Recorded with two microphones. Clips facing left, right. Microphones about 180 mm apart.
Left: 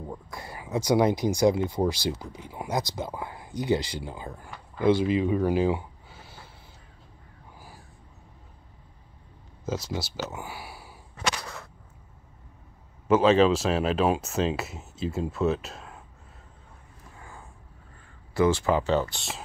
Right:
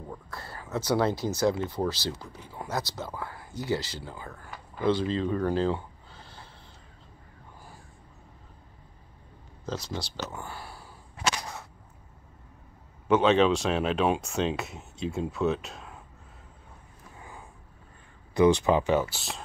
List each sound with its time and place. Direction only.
0.1 s speech: 15° left (ahead or behind)
9.7 s speech: 5° left (ahead or behind)
13.1 s speech: centre (ahead or behind)
17.2 s vehicle: 15° right (ahead or behind)
18.3 s speech: 20° right (ahead or behind); by 19.4 s centre (ahead or behind)